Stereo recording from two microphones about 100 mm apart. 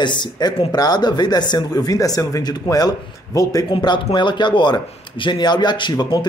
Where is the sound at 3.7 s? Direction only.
50° left (ahead or behind).